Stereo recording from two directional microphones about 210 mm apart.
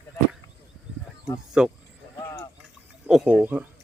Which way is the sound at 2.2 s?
15° left (ahead or behind).